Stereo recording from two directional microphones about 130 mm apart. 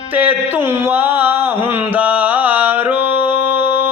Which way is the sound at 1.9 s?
15° right (ahead or behind).